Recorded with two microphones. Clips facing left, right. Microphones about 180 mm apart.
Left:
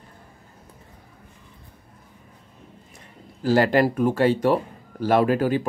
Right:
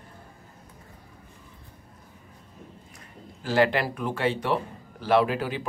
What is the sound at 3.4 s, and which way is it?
Speech, 40° left (ahead or behind).